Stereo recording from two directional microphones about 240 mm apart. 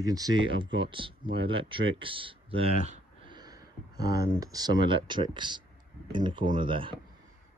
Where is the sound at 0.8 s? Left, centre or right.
Right.